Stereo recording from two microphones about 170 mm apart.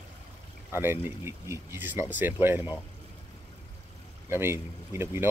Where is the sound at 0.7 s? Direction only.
15° right (ahead or behind).